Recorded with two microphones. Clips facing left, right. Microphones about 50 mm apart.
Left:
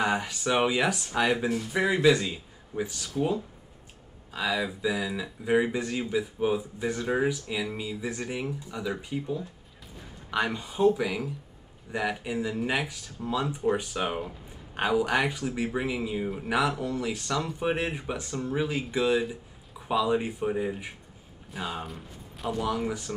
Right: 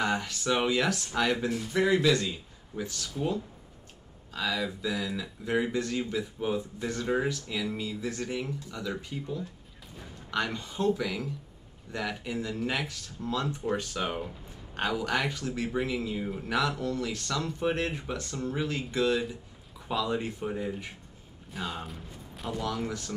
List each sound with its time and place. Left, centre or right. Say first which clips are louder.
0.0 s speech: left 2 dB; centre
21.9 s a sound: left 1 dB; centre
22.6 s speech: left 3 dB; centre